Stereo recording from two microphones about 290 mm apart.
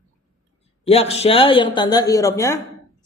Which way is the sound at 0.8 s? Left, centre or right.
Left.